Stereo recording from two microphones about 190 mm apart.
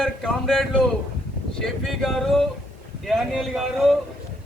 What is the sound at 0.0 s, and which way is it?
A man's voice, centre (ahead or behind).